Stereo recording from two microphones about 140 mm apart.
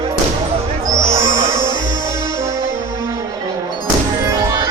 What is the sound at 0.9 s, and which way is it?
Music, 25° right (ahead or behind).